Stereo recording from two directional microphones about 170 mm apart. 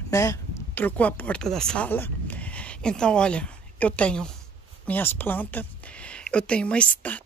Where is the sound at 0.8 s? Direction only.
10° left (ahead or behind).